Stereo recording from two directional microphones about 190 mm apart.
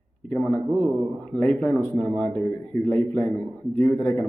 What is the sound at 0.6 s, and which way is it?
Speech, 20° right (ahead or behind).